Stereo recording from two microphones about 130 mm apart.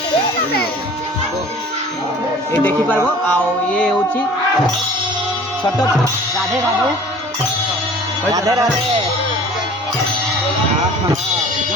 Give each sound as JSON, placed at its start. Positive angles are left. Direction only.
{"t": 3.3, "sound": "music", "side_deg": 5}
{"t": 8.3, "sound": "speech", "side_deg": -25}